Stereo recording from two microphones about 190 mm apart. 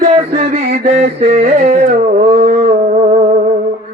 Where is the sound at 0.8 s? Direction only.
35° right (ahead or behind).